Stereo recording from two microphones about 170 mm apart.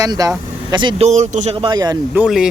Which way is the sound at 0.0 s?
20° right (ahead or behind).